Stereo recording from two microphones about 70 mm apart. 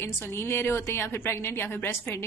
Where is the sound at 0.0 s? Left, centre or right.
Left.